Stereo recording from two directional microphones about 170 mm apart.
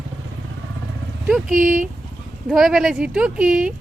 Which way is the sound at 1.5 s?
50° right (ahead or behind).